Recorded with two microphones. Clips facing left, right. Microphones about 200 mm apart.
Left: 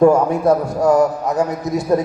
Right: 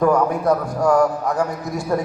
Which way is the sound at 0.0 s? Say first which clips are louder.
Left 5 dB; 25° left (ahead or behind).